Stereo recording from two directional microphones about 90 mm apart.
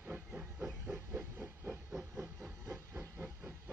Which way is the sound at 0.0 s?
15° right (ahead or behind).